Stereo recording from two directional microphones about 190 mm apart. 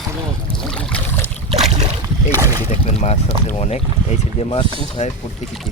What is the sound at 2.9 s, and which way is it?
Speech, 35° left (ahead or behind).